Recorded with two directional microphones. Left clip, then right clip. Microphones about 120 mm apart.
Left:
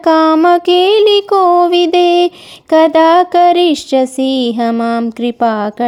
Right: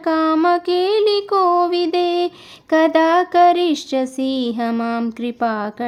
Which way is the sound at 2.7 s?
40° left (ahead or behind).